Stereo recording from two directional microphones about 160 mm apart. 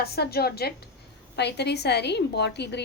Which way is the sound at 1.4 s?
90° left.